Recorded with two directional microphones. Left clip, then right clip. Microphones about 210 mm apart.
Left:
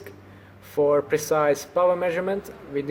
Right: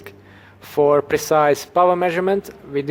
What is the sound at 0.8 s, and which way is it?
Speech, 45° right (ahead or behind).